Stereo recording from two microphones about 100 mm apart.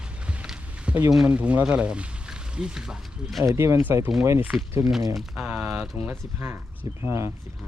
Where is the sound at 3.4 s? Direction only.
30° right (ahead or behind).